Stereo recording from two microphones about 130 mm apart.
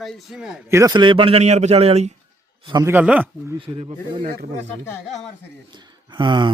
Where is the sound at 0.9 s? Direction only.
35° right (ahead or behind); by 2.2 s 55° right (ahead or behind).